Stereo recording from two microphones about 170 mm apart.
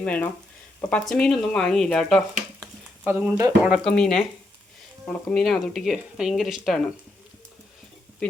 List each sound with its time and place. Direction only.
0.0 s speech: 10° left (ahead or behind)
3.0 s speech: 10° right (ahead or behind)
3.7 s speech: 5° left (ahead or behind)